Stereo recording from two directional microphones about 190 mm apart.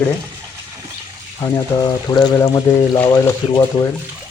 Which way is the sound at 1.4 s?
20° left (ahead or behind).